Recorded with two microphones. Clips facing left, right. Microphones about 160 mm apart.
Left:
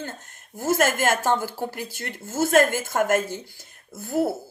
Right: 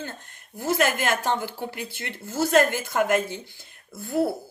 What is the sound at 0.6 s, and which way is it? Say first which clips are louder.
Speech: left 2 dB; 45° left (ahead or behind).